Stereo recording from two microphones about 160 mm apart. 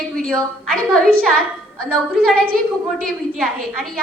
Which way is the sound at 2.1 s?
70° right (ahead or behind).